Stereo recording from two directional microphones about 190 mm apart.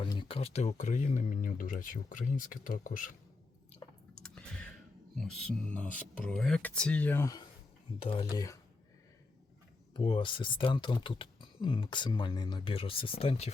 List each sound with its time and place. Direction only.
0.0 s speech: 25° left (ahead or behind); by 3.2 s 45° left (ahead or behind)
4.1 s clicking: 5° left (ahead or behind)
5.1 s speech: 5° left (ahead or behind)
7.9 s speech: 25° left (ahead or behind)
9.9 s speech: 25° left (ahead or behind)